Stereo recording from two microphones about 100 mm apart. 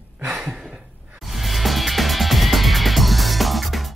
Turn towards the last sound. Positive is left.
turn(degrees=0)  # may be behind; listen again after turning